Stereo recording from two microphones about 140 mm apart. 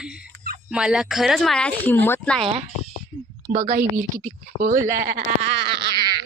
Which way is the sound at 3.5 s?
75° right (ahead or behind).